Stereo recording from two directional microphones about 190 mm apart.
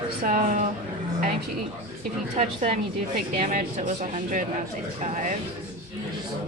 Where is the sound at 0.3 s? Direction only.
40° right (ahead or behind).